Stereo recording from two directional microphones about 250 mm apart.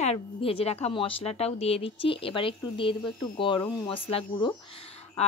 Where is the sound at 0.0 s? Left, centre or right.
Left.